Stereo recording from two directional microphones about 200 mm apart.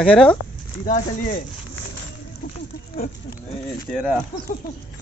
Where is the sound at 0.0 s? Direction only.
5° left (ahead or behind).